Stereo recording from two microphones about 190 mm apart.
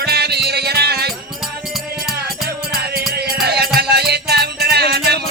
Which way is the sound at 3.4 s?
55° right (ahead or behind).